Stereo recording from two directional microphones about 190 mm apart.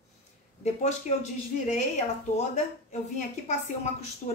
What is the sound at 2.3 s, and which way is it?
A woman's voice, 35° left (ahead or behind).